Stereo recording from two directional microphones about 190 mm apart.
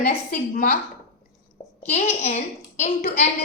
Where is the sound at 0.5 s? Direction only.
45° left (ahead or behind).